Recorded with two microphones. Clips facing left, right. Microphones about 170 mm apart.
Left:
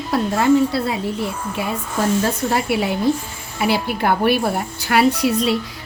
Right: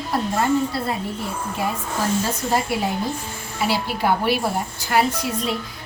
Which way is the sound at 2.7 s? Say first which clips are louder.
Left 5 dB; 70° left (ahead or behind).